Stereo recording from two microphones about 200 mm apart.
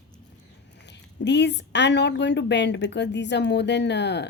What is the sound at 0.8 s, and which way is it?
Speech, 60° left (ahead or behind).